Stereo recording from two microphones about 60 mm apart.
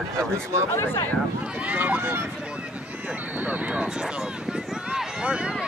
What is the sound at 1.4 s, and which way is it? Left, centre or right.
Speech, right.